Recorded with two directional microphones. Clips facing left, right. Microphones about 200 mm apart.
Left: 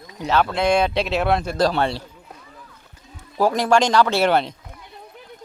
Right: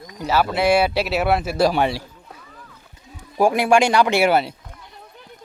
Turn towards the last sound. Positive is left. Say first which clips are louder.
# right 1 dB
turn(degrees=-5)  # may be behind; listen again after turning